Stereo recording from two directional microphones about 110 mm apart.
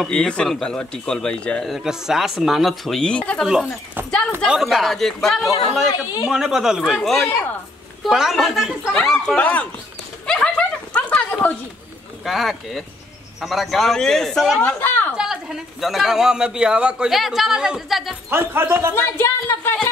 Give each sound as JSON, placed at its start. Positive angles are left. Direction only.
{"t": 0.1, "sound": "a man's voice", "side_deg": 10}
{"t": 1.7, "sound": "a man's voice", "side_deg": -5}
{"t": 4.5, "sound": "a man's voice", "side_deg": 0}
{"t": 9.4, "sound": "speech", "side_deg": 15}
{"t": 10.2, "sound": "a sound", "side_deg": 10}
{"t": 12.3, "sound": "a man's voice", "side_deg": 0}
{"t": 14.6, "sound": "a woman's voice", "side_deg": 15}
{"t": 15.1, "sound": "a man's voice", "side_deg": -5}
{"t": 18.3, "sound": "speech", "side_deg": -20}
{"t": 18.9, "sound": "speech", "side_deg": 20}